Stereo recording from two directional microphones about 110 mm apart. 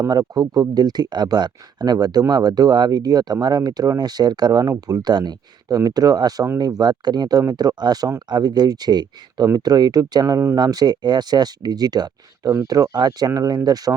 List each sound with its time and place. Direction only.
0.0 s speech: 35° right (ahead or behind)